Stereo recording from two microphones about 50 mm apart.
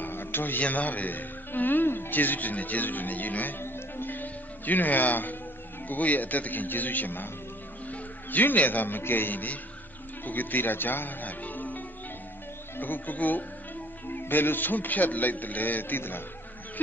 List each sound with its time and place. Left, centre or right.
0.0 s a man's voice: left
3.6 s music: left
5.9 s a man's voice: left